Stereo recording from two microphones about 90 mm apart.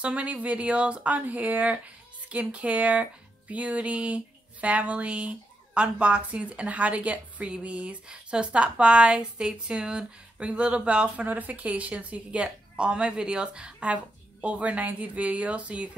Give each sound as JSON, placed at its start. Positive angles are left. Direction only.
{"t": 0.0, "sound": "speech", "side_deg": -15}